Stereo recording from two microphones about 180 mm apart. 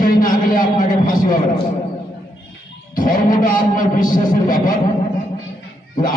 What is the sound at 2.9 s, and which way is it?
A man's voice, 50° left (ahead or behind).